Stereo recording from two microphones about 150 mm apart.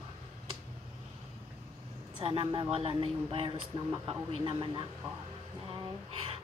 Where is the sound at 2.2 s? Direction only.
35° right (ahead or behind).